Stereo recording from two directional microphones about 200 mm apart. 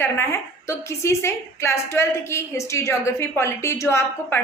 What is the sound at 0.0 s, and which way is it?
A woman's voice, 10° left (ahead or behind).